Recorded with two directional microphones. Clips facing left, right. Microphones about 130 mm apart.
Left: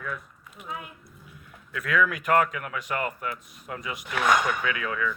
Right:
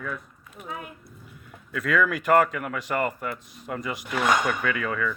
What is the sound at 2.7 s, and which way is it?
Speech, 85° right.